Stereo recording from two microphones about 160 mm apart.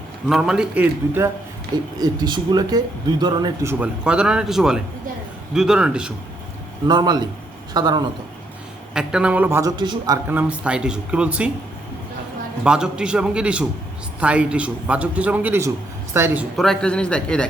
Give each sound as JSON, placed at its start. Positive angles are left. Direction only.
{"t": 0.3, "sound": "speech", "side_deg": 0}
{"t": 2.0, "sound": "speech", "side_deg": -25}
{"t": 3.7, "sound": "speech", "side_deg": -10}
{"t": 6.8, "sound": "speech", "side_deg": -25}
{"t": 8.9, "sound": "a man's voice", "side_deg": -5}
{"t": 10.2, "sound": "a man's voice", "side_deg": -10}
{"t": 12.6, "sound": "a man's voice", "side_deg": -5}
{"t": 16.6, "sound": "speech", "side_deg": 5}